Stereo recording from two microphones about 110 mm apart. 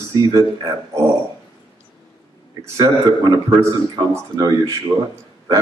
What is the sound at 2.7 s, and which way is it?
Speech, 35° right (ahead or behind).